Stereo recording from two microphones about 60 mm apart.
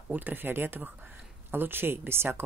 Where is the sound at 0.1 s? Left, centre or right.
Right.